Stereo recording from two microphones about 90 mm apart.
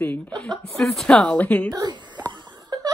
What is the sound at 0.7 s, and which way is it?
Speech, 5° left (ahead or behind).